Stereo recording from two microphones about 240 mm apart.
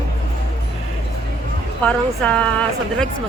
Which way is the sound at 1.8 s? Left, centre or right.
Centre.